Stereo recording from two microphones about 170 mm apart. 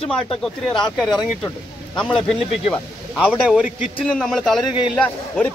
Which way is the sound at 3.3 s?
5° right (ahead or behind).